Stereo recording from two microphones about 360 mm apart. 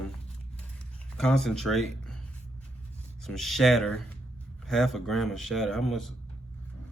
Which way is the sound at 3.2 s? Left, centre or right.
Centre.